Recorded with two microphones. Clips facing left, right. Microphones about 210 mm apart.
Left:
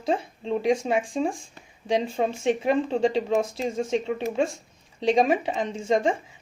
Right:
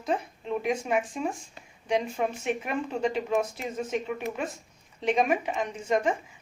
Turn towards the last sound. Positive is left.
turn(degrees=30)  # may be behind; listen again after turning